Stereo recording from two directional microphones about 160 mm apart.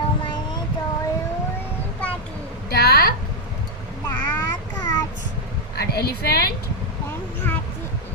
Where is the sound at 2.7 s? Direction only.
75° left (ahead or behind).